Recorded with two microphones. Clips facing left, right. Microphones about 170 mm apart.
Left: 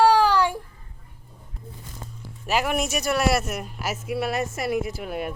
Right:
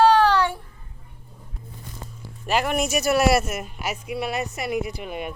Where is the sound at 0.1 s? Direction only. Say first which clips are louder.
Right 1 dB; 10° left (ahead or behind).